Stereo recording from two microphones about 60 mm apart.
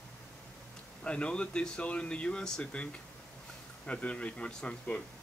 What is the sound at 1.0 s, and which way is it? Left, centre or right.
Speech, centre.